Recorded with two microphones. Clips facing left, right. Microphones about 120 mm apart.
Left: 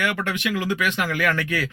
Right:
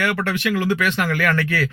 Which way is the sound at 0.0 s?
15° left (ahead or behind).